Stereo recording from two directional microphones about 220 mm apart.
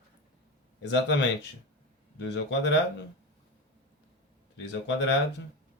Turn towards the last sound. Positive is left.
turn(degrees=50)  # may be behind; listen again after turning